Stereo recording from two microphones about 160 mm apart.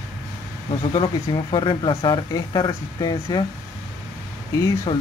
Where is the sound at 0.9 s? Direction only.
30° left (ahead or behind).